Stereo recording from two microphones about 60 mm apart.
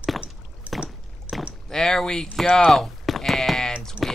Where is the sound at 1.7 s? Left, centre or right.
Centre.